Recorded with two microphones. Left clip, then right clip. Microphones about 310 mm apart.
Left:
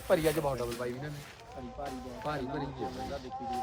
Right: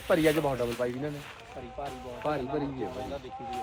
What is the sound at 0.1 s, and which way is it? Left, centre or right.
Speech, right.